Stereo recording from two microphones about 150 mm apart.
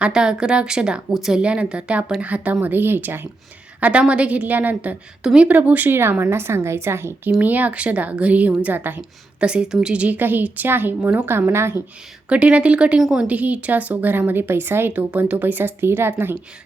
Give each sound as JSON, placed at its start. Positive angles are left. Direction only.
{"t": 0.0, "sound": "a woman's voice", "side_deg": -5}